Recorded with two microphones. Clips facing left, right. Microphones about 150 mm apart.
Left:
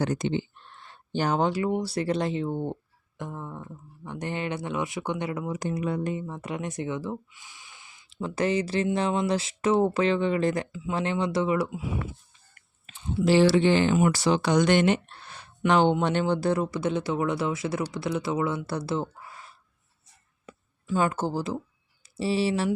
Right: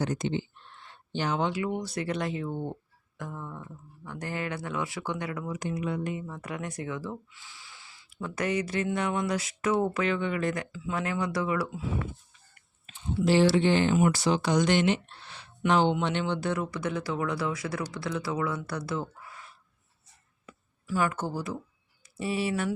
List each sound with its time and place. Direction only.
0.0 s speech: 65° left (ahead or behind)
0.6 s speech: 45° left (ahead or behind); by 5.5 s 25° left (ahead or behind)
5.5 s speech: 40° left (ahead or behind)
6.2 s speech: 20° left (ahead or behind)
10.7 s speech: 20° left (ahead or behind)
12.5 s speech: 70° left (ahead or behind); by 15.4 s 50° left (ahead or behind)
15.6 s speech: 65° left (ahead or behind); by 22.7 s 30° left (ahead or behind)